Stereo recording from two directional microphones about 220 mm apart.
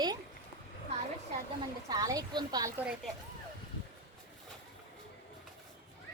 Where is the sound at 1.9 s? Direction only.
15° right (ahead or behind).